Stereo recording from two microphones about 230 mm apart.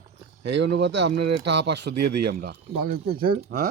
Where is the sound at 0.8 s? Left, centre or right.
Right.